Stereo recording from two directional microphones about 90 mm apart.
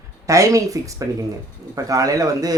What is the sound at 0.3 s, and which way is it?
Speech, 35° right (ahead or behind).